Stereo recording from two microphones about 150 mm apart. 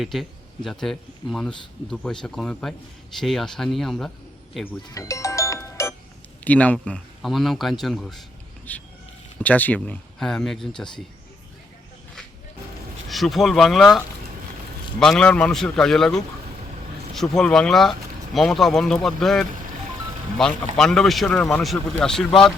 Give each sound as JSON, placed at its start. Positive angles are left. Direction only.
{"t": 0.0, "sound": "speech", "side_deg": 0}
{"t": 4.9, "sound": "music", "side_deg": 20}
{"t": 6.4, "sound": "speech", "side_deg": 10}
{"t": 13.1, "sound": "speech", "side_deg": 0}